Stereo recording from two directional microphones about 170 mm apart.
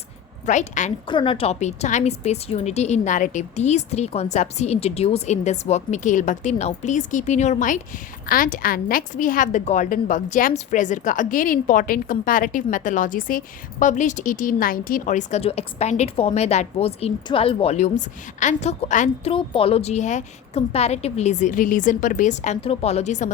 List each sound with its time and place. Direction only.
0.4 s a woman's voice: 45° left (ahead or behind)
1.0 s a woman's voice: 30° left (ahead or behind); by 19.3 s 45° left (ahead or behind)
19.3 s a woman's voice: 30° left (ahead or behind)